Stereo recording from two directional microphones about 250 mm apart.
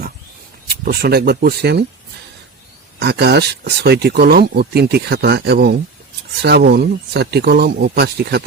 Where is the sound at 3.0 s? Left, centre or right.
Right.